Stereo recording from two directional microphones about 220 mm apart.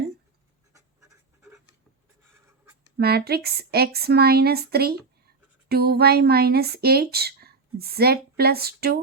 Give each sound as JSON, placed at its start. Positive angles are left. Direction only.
{"t": 3.0, "sound": "speech", "side_deg": -45}